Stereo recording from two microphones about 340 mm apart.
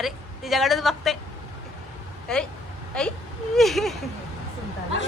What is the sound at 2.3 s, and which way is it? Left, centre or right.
A woman's voice, centre.